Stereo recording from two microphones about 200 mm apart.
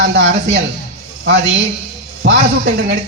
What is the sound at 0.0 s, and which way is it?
Speech, 60° right (ahead or behind).